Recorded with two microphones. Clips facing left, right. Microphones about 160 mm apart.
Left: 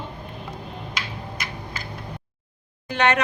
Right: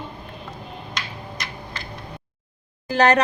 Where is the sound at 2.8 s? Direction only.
35° right (ahead or behind).